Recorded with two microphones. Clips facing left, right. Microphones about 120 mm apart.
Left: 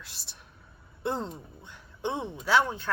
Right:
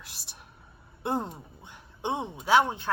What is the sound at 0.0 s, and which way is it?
Speech, 15° right (ahead or behind).